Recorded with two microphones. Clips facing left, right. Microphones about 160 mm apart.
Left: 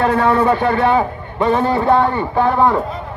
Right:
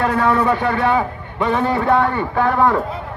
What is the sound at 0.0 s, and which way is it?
A man's voice, 25° left (ahead or behind).